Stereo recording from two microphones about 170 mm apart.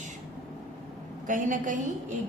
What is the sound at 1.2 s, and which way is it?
Speech, 50° right (ahead or behind).